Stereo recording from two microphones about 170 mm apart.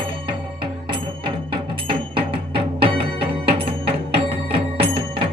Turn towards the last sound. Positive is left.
turn(degrees=-30)  # may be behind; listen again after turning